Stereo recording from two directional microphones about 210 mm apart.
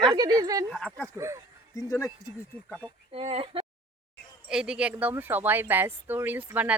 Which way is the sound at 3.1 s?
25° right (ahead or behind).